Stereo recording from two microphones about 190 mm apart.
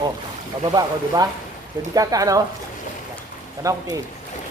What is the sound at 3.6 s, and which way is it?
Speech, 15° right (ahead or behind).